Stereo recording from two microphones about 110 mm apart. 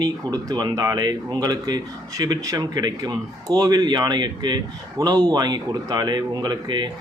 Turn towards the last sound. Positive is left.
turn(degrees=-45)  # may be behind; listen again after turning